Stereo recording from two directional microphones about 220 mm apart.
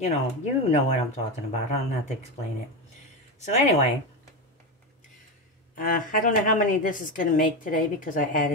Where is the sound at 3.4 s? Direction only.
30° left (ahead or behind).